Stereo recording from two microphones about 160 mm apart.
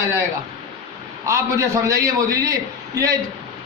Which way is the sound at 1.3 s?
20° right (ahead or behind).